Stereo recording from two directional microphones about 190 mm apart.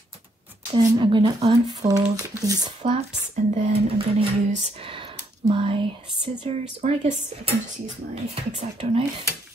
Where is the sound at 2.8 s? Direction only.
35° right (ahead or behind).